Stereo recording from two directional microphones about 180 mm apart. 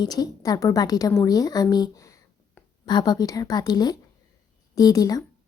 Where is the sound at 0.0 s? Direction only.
20° left (ahead or behind).